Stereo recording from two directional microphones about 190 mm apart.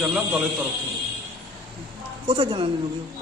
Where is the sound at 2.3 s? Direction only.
25° right (ahead or behind).